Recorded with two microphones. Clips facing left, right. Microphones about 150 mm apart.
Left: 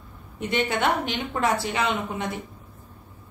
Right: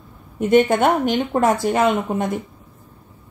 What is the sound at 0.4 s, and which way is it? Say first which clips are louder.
A woman's voice: right 10 dB; 45° right (ahead or behind).